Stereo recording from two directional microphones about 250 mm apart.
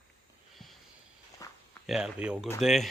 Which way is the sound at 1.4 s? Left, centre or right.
Centre.